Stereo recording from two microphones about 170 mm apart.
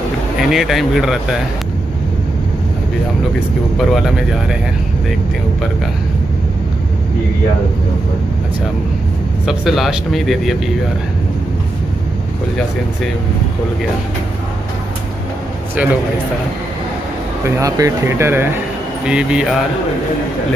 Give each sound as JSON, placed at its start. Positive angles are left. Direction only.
{"t": 0.5, "sound": "a man's voice", "side_deg": 0}
{"t": 3.7, "sound": "a man's voice", "side_deg": 0}
{"t": 9.5, "sound": "a man's voice", "side_deg": 0}
{"t": 15.7, "sound": "speech", "side_deg": -10}
{"t": 17.6, "sound": "a man's voice", "side_deg": -20}